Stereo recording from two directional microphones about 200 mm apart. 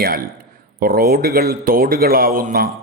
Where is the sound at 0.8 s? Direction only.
50° right (ahead or behind).